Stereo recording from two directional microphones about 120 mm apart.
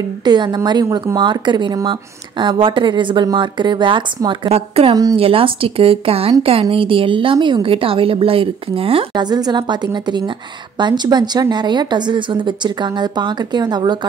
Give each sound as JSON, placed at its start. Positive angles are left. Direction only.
{"t": 0.2, "sound": "speech", "side_deg": -35}
{"t": 4.5, "sound": "a woman's voice", "side_deg": -55}
{"t": 9.1, "sound": "speech", "side_deg": -35}